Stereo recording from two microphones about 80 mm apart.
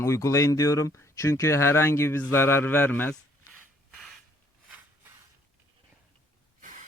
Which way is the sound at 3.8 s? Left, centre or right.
Centre.